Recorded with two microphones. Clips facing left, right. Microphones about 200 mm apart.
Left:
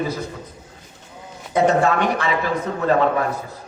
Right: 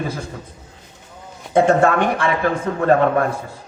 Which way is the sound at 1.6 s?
50° right (ahead or behind).